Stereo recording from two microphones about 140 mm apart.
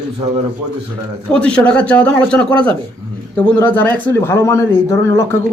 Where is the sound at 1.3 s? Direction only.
5° left (ahead or behind).